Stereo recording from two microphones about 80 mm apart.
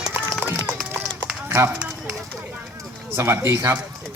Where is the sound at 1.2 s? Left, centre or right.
Right.